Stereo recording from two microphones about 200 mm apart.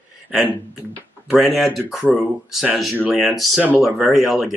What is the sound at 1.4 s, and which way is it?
Speech, centre (ahead or behind).